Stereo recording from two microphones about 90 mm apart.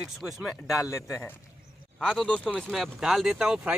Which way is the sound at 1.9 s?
5° left (ahead or behind).